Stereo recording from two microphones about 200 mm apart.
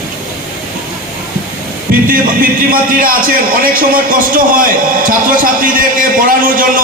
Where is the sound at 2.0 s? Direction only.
45° right (ahead or behind).